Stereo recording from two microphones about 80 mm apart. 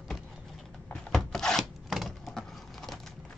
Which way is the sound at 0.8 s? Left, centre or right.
Centre.